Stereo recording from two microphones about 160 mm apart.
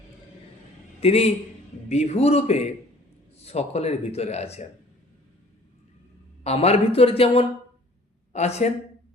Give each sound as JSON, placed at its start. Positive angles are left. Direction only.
{"t": 1.0, "sound": "speech", "side_deg": 40}
{"t": 6.4, "sound": "speech", "side_deg": 40}